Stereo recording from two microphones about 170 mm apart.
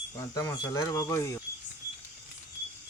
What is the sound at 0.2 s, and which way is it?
Speech, 20° left (ahead or behind).